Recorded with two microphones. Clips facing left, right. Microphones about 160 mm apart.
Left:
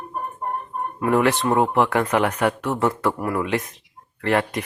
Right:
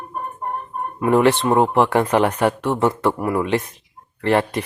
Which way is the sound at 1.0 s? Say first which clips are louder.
Right 4 dB; 25° right (ahead or behind).